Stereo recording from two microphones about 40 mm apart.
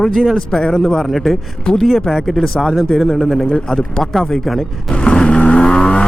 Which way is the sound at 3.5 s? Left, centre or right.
Centre.